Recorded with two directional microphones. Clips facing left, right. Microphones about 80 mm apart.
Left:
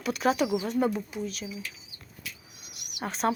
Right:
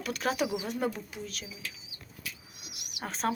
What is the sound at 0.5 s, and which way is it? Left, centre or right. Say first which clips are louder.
Speech: left 6 dB; centre.